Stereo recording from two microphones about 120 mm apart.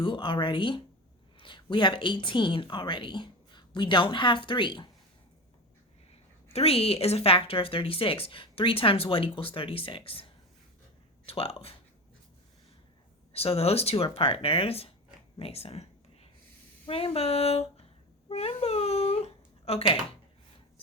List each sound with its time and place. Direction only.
0.0 s a woman's voice: 45° left (ahead or behind)
6.1 s a woman's voice: 55° left (ahead or behind)
11.3 s speech: 55° left (ahead or behind)
13.3 s a woman's voice: 55° left (ahead or behind)
15.4 s a sound: 55° left (ahead or behind)
16.8 s speech: 50° left (ahead or behind)
18.3 s a sound: 55° left (ahead or behind)